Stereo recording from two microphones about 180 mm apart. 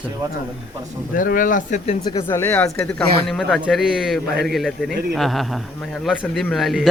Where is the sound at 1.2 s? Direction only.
50° left (ahead or behind).